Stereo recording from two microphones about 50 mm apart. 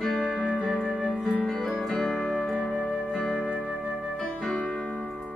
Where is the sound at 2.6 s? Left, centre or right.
Left.